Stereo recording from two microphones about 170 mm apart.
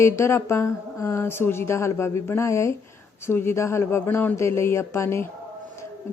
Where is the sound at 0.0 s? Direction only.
15° left (ahead or behind).